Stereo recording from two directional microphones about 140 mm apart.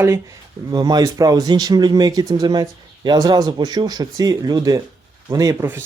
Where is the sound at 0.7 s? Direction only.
30° right (ahead or behind).